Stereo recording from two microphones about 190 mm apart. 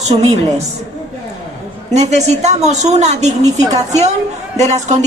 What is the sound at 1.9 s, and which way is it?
A woman's voice, 35° right (ahead or behind).